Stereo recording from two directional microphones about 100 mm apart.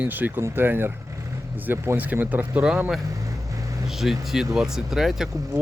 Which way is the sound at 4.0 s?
5° right (ahead or behind).